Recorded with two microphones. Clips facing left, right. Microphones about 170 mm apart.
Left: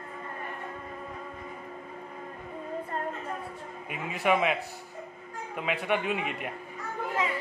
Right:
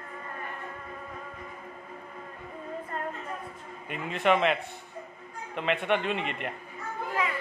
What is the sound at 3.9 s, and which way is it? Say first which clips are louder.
Speech: right 1 dB; 5° left (ahead or behind).